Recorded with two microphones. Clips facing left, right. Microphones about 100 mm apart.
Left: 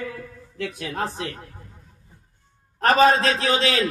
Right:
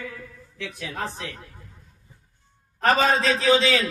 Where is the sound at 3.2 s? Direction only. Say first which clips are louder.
Right 2 dB; 55° left (ahead or behind).